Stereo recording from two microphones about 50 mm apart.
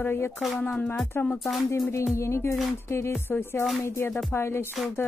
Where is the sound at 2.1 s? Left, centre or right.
Left.